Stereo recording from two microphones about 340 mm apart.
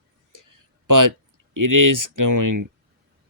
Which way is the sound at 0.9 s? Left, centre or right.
Right.